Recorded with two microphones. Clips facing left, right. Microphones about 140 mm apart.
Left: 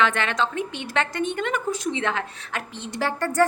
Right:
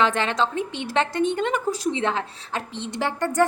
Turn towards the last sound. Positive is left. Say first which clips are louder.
# even
turn(degrees=-20)  # may be behind; listen again after turning